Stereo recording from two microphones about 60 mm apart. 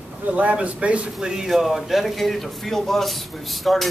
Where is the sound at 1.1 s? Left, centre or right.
Centre.